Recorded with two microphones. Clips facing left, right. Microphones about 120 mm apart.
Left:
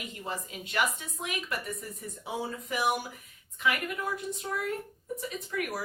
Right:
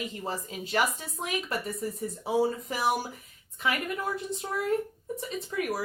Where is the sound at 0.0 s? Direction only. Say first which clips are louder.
Right 3 dB; 35° right (ahead or behind).